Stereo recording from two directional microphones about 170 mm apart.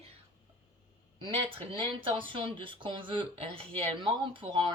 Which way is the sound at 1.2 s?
30° right (ahead or behind).